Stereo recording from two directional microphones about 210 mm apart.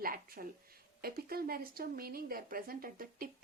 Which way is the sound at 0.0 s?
45° right (ahead or behind).